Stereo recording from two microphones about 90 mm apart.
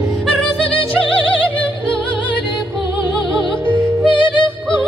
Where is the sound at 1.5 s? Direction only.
15° left (ahead or behind).